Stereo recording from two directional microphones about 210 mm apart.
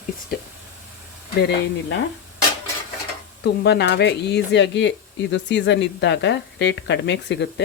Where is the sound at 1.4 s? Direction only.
55° left (ahead or behind).